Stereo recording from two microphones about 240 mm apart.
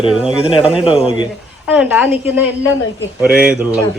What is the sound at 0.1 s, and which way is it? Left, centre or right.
Speech, centre.